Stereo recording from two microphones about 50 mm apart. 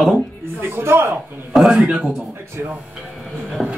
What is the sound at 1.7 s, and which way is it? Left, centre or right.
Speech, centre.